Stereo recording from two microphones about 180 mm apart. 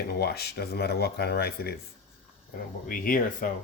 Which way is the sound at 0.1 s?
60° left (ahead or behind).